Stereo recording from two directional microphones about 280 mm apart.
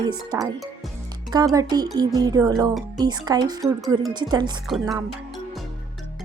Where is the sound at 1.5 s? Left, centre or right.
Centre.